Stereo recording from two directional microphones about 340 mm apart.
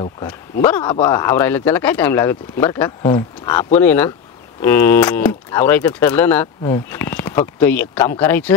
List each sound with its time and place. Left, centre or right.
0.0 s speech: centre